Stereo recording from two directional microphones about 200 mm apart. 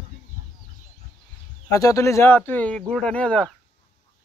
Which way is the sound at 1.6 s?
15° left (ahead or behind).